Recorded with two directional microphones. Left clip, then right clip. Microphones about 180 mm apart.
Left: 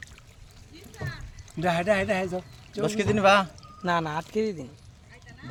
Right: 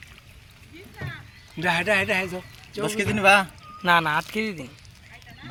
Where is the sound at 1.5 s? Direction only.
65° left (ahead or behind).